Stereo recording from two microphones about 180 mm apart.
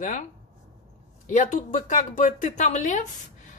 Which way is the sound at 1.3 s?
45° left (ahead or behind).